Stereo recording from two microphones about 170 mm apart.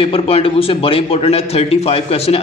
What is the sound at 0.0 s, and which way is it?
A man's voice, 35° left (ahead or behind).